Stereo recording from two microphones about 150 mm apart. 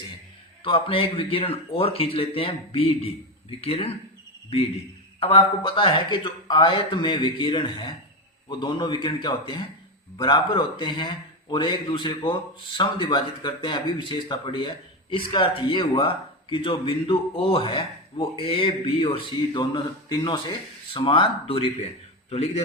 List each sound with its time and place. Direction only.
0.6 s a man's voice: 35° left (ahead or behind)
5.2 s a man's voice: 35° left (ahead or behind)